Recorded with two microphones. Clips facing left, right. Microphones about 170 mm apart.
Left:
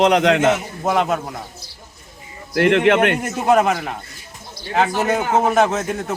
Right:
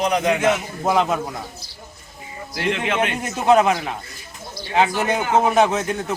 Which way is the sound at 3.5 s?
5° left (ahead or behind).